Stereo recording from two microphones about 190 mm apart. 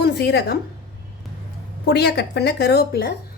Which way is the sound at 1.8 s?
60° left (ahead or behind).